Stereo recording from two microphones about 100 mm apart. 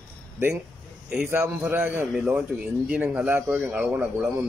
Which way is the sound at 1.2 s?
20° right (ahead or behind).